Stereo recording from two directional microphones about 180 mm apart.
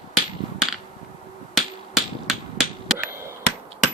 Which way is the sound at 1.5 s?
Centre (ahead or behind).